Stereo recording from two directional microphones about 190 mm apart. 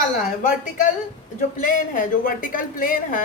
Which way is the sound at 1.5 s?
45° left (ahead or behind).